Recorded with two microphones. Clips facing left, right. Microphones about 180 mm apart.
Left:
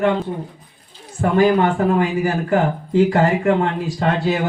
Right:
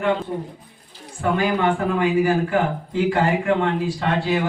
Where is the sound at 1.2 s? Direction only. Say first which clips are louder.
Left 5 dB; 40° left (ahead or behind).